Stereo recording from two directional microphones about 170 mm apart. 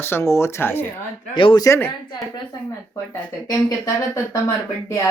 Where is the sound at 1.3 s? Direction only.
30° left (ahead or behind).